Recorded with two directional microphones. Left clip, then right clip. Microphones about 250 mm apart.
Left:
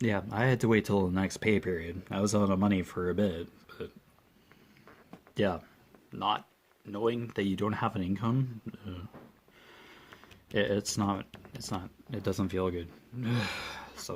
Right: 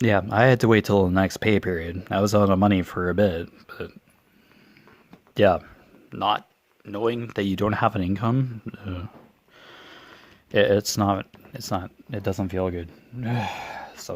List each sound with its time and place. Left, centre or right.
0.0 s speech: right
5.3 s speech: right